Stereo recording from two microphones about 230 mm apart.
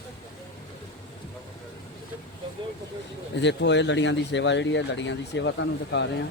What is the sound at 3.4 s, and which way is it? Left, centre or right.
Speech, left.